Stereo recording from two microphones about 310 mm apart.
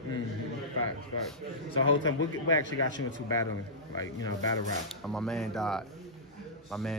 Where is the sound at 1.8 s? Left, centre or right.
Left.